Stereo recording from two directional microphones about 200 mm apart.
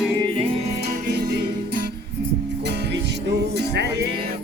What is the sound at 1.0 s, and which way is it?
Music, 55° right (ahead or behind).